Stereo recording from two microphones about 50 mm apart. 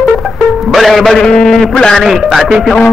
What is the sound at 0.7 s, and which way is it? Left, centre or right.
Speech, centre.